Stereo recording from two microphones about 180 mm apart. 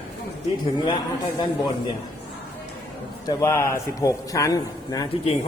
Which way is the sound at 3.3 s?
15° left (ahead or behind).